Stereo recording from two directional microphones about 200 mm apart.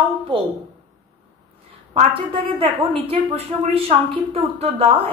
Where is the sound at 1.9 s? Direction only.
25° right (ahead or behind).